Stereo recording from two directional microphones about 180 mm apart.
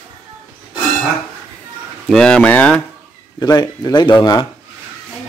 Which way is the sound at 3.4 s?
20° left (ahead or behind).